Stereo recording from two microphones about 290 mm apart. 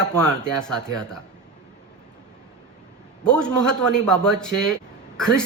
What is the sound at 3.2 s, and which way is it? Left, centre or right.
A man's voice, centre.